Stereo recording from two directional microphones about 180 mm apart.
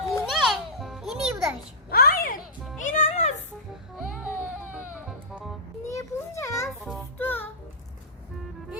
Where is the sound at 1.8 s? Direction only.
55° left (ahead or behind).